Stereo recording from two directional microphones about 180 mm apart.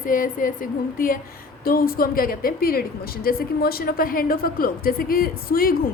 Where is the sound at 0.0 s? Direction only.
50° left (ahead or behind).